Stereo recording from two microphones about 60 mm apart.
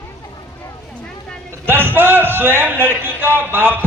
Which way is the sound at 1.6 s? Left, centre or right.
Right.